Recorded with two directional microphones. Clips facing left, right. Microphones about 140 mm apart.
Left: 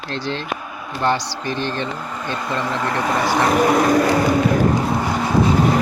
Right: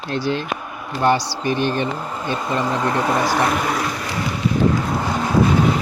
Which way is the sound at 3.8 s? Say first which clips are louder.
Left 9 dB; 50° left (ahead or behind).